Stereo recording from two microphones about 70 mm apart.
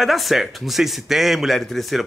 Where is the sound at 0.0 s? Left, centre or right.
Centre.